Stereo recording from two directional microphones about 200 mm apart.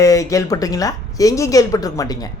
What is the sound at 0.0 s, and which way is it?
Speech, 15° left (ahead or behind).